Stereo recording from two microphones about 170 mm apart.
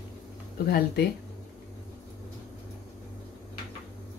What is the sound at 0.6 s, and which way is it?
Speech, 65° left (ahead or behind).